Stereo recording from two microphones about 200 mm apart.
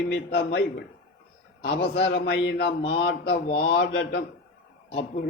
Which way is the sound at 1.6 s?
55° left (ahead or behind).